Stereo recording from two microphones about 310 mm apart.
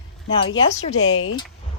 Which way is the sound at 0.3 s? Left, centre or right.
Centre.